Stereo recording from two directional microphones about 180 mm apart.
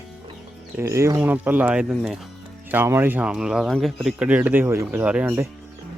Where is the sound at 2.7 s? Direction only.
15° right (ahead or behind).